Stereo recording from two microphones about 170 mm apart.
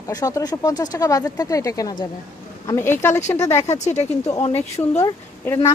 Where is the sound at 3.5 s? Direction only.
40° left (ahead or behind).